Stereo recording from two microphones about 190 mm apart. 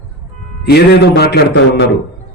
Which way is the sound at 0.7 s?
60° left (ahead or behind).